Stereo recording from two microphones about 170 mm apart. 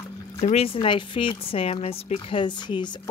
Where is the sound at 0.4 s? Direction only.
35° left (ahead or behind).